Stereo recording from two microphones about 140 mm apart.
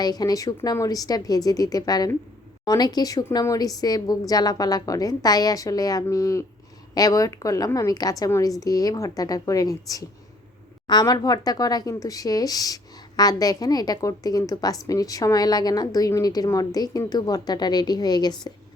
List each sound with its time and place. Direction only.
0.0 s speech: 25° left (ahead or behind)